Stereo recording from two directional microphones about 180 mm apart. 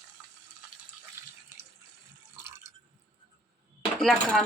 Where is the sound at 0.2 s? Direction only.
Centre (ahead or behind).